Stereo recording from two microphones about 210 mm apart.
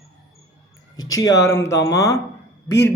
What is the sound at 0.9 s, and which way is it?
Speech, 15° left (ahead or behind).